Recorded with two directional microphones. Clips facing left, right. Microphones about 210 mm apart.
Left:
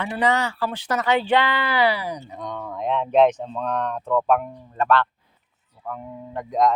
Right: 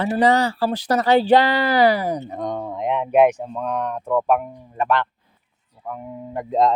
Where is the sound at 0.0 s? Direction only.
35° right (ahead or behind).